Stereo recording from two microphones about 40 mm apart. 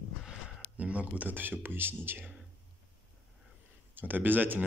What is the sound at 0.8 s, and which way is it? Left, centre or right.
Speech, right.